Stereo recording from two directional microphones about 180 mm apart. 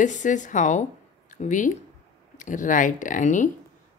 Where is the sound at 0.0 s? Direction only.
45° left (ahead or behind).